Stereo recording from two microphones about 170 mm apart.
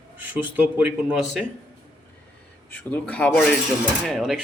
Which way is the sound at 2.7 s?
10° left (ahead or behind).